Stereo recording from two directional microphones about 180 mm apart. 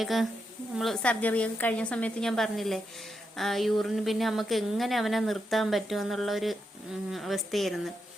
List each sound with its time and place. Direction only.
0.0 s a woman's voice: centre (ahead or behind)